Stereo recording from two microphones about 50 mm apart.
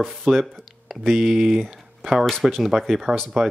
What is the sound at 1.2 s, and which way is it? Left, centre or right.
Speech, centre.